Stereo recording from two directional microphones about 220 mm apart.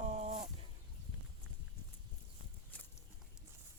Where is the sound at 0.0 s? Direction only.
30° right (ahead or behind).